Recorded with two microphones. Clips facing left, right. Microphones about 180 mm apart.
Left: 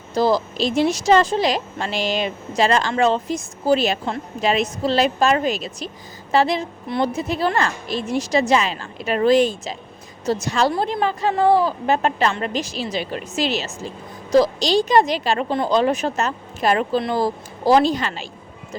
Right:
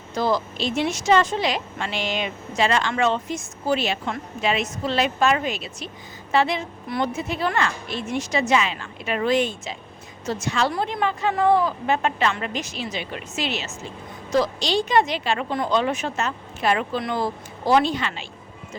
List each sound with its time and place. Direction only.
0.1 s a woman's voice: 35° left (ahead or behind)